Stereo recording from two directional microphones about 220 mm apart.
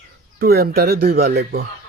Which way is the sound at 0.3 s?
45° right (ahead or behind).